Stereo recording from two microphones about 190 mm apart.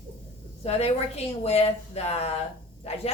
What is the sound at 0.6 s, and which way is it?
A woman's voice, 35° left (ahead or behind).